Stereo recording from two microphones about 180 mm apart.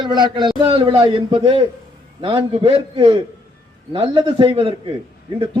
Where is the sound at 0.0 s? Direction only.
25° right (ahead or behind).